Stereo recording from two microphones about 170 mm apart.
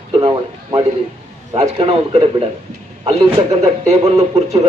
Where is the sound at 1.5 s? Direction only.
35° right (ahead or behind).